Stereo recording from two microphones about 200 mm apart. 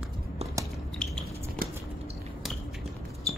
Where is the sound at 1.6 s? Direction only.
45° right (ahead or behind).